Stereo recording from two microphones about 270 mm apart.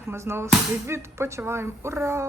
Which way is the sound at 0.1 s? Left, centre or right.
Centre.